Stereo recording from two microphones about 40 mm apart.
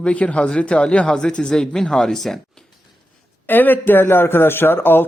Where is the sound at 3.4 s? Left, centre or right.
Left.